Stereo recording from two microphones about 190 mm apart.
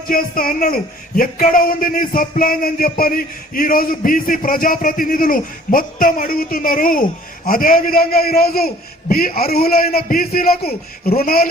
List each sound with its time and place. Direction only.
0.1 s a man's voice: 50° left (ahead or behind)